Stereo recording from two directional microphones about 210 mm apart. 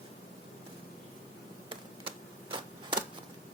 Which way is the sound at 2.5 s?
25° right (ahead or behind).